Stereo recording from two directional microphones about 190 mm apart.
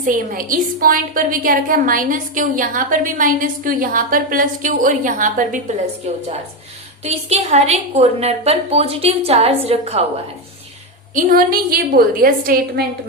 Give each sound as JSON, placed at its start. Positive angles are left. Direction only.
{"t": 0.0, "sound": "a woman's voice", "side_deg": -45}
{"t": 11.1, "sound": "a woman's voice", "side_deg": -45}